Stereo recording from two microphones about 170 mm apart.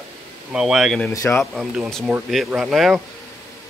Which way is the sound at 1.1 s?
20° left (ahead or behind).